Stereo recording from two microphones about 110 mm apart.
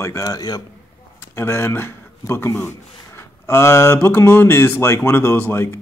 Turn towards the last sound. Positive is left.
turn(degrees=20)  # may be behind; listen again after turning